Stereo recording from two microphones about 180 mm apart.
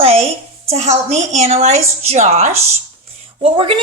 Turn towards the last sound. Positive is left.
turn(degrees=-30)  # may be behind; listen again after turning